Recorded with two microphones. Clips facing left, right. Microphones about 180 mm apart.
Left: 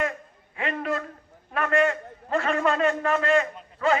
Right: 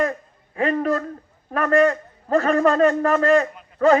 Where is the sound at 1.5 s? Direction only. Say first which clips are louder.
Right 6 dB; 40° right (ahead or behind).